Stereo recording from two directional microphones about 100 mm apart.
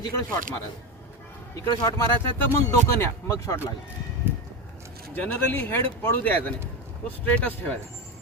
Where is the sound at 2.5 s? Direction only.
30° left (ahead or behind).